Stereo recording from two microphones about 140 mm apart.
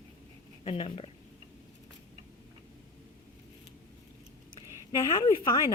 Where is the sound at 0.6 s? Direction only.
40° left (ahead or behind).